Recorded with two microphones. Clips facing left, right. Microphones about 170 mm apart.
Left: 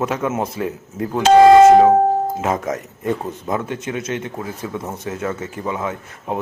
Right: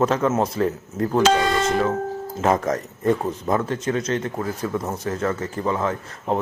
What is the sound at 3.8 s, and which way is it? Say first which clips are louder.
Speech: right 2 dB; 15° left (ahead or behind).